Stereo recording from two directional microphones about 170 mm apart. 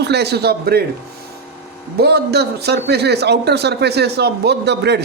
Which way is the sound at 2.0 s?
75° right (ahead or behind).